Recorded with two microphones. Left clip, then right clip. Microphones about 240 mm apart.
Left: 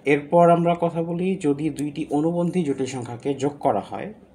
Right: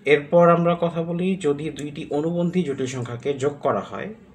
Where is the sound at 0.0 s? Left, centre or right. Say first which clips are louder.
Right 1 dB; left.